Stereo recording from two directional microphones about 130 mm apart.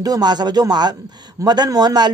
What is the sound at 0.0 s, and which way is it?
Speech, 30° right (ahead or behind).